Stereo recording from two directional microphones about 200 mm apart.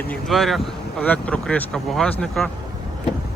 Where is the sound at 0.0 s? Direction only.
5° left (ahead or behind).